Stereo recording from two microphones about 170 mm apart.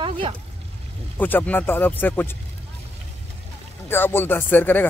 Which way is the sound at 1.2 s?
10° left (ahead or behind).